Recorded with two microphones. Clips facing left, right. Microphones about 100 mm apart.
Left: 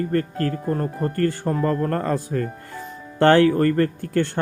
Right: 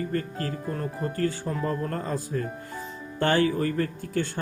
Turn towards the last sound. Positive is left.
turn(degrees=65)  # may be behind; listen again after turning